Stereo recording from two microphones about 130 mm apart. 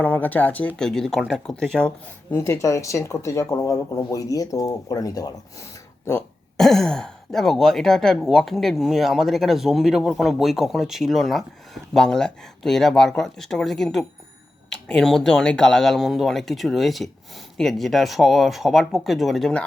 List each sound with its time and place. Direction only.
0.0 s speech: 10° left (ahead or behind)
2.3 s speech: 20° left (ahead or behind)
6.6 s speech: 5° left (ahead or behind)